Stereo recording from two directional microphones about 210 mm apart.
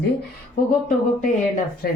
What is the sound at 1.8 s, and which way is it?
Speech, 45° left (ahead or behind).